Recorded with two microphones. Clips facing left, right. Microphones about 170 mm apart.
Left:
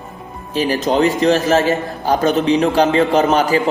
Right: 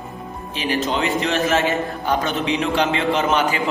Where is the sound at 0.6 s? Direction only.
40° left (ahead or behind).